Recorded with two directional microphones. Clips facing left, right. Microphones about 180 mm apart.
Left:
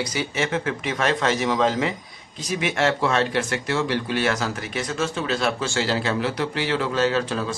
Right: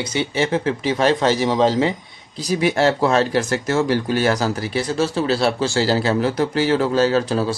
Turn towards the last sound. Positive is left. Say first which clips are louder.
# right 5 dB
turn(degrees=-35)  # may be behind; listen again after turning